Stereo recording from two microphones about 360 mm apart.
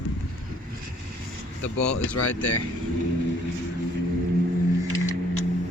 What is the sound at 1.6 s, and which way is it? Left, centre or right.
Speech, left.